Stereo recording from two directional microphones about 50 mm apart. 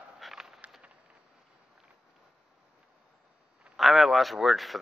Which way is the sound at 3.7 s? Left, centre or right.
Centre.